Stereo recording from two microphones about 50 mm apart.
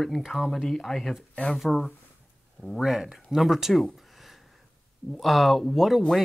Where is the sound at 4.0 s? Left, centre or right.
Centre.